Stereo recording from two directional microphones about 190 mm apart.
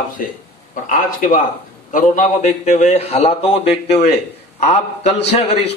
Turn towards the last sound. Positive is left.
turn(degrees=35)  # may be behind; listen again after turning